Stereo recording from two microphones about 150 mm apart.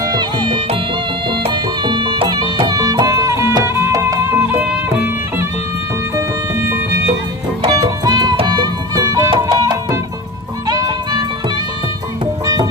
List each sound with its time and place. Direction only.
0.0 s music: 30° right (ahead or behind); by 5.5 s 10° right (ahead or behind)
7.6 s music: 30° right (ahead or behind)